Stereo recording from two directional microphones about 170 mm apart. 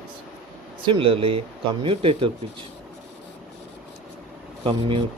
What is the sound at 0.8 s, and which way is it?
Speech, 30° right (ahead or behind).